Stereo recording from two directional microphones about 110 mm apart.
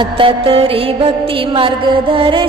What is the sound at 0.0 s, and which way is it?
Music, 55° right (ahead or behind).